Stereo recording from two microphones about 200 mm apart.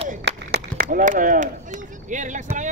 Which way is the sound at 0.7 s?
40° right (ahead or behind).